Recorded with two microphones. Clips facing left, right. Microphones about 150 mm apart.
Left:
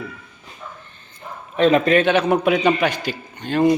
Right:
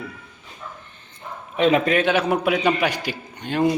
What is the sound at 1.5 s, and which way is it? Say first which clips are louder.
A man's voice: left 3 dB; 10° right (ahead or behind).